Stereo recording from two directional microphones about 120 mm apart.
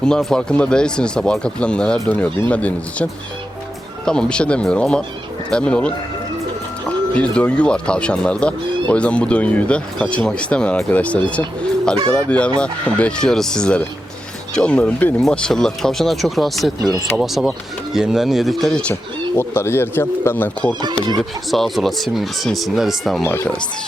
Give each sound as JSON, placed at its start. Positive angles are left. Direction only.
{"t": 0.0, "sound": "speech", "side_deg": 5}
{"t": 19.4, "sound": "speech", "side_deg": 20}
{"t": 21.2, "sound": "speech", "side_deg": 0}
{"t": 23.2, "sound": "speech", "side_deg": 20}